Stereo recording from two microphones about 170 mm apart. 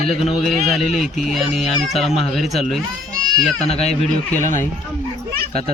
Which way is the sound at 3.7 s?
40° left (ahead or behind).